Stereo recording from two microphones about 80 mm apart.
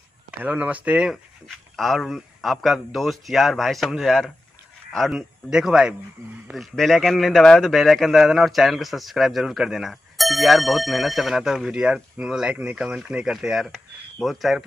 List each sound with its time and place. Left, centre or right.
0.4 s speech: centre
1.8 s speech: centre
6.5 s speech: centre